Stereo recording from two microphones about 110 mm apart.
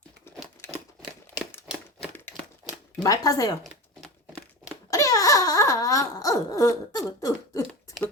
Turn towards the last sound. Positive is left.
turn(degrees=30)  # may be behind; listen again after turning